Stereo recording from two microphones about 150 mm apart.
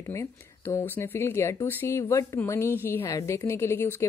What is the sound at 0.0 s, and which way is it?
Speech, 20° left (ahead or behind).